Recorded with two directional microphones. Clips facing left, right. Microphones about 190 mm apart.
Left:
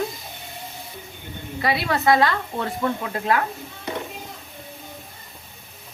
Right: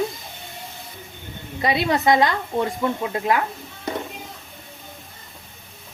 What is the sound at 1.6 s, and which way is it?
Speech, 20° right (ahead or behind).